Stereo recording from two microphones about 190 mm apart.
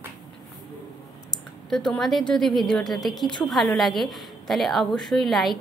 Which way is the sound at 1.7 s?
Centre (ahead or behind).